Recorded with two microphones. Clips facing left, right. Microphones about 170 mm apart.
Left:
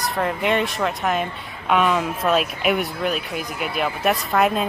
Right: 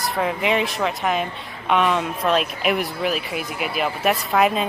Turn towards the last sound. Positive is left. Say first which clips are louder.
# even
turn(degrees=0)  # may be behind; listen again after turning